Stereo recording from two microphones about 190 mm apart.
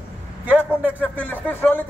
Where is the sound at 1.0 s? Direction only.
10° left (ahead or behind).